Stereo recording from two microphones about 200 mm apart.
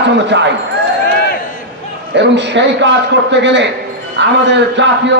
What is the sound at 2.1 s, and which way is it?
A man's voice, 65° right (ahead or behind).